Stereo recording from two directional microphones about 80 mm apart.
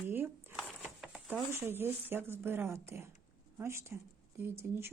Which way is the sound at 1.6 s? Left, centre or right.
Right.